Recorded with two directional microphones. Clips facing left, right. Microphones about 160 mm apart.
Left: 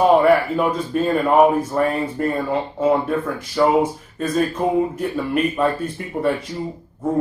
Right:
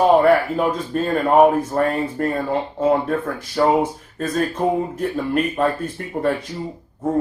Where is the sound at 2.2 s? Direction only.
45° right (ahead or behind).